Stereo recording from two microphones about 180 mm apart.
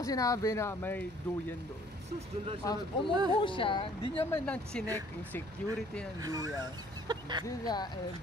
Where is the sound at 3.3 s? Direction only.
30° left (ahead or behind).